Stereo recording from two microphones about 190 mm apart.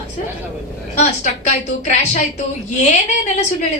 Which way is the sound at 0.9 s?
35° left (ahead or behind).